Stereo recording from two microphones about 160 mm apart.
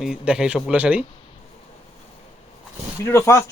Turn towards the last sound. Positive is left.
turn(degrees=15)  # may be behind; listen again after turning